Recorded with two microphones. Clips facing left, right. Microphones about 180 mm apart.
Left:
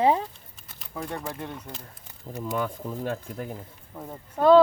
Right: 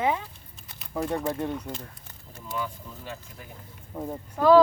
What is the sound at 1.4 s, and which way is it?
Speech, centre (ahead or behind).